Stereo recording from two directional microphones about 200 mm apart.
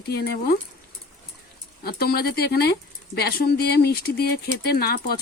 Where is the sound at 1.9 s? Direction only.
50° left (ahead or behind).